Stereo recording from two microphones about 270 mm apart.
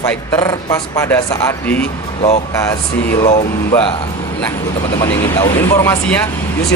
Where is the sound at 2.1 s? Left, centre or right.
Left.